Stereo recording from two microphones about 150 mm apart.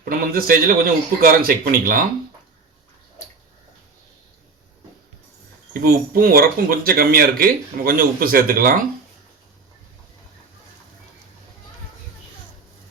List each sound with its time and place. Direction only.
0.0 s speech: 75° right (ahead or behind)
5.8 s speech: 75° right (ahead or behind)